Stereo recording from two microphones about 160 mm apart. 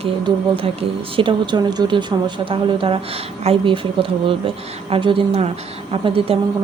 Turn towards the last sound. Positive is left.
turn(degrees=-35)  # may be behind; listen again after turning